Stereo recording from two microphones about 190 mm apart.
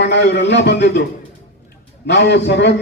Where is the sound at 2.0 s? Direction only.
65° left (ahead or behind).